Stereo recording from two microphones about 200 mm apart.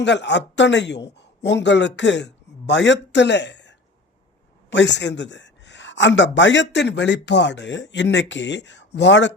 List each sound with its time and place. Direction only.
0.0 s speech: 60° left (ahead or behind)